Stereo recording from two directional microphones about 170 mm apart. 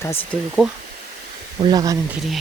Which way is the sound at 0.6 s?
Centre (ahead or behind).